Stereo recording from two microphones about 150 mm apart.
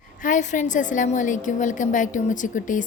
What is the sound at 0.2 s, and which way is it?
A woman's voice, 55° left (ahead or behind).